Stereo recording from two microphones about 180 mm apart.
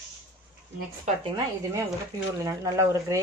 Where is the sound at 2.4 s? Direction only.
15° right (ahead or behind).